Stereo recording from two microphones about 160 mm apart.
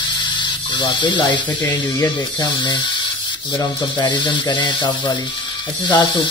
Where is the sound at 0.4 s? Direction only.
30° left (ahead or behind).